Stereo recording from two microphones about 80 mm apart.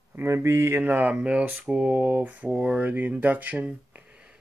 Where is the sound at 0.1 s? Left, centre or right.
Right.